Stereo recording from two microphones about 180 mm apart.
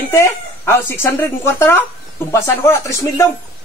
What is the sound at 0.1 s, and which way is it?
Speech, 15° left (ahead or behind).